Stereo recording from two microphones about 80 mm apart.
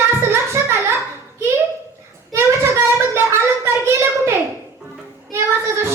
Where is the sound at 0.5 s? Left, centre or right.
Right.